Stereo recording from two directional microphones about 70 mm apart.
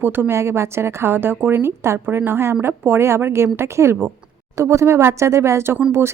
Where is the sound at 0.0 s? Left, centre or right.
Right.